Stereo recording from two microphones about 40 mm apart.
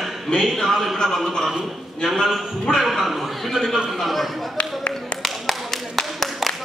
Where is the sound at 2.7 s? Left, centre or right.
Centre.